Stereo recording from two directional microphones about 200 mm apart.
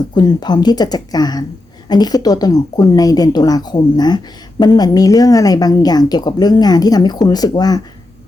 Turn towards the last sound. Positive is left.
turn(degrees=20)  # may be behind; listen again after turning